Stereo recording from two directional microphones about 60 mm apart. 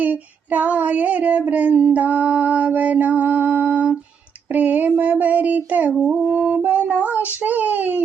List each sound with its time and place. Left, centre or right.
0.0 s female singing: right
4.5 s child singing: right
6.3 s music: right
7.4 s speech: right